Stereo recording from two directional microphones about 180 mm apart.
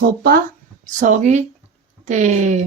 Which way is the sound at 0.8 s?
45° right (ahead or behind).